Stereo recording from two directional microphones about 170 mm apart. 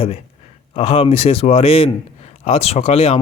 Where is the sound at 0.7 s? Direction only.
35° left (ahead or behind).